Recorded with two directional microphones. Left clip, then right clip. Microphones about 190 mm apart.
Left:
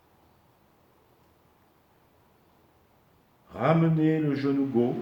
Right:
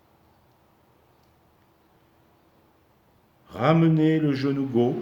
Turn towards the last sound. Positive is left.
turn(degrees=-55)  # may be behind; listen again after turning